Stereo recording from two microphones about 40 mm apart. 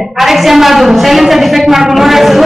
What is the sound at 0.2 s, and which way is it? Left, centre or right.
A woman's voice, centre.